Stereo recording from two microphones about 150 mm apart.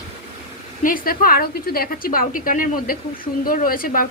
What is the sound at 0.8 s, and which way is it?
A woman's voice, 70° left (ahead or behind).